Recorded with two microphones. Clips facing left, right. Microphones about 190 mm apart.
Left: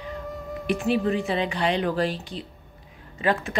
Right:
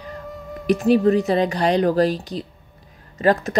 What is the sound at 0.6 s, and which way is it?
Speech, 40° right (ahead or behind).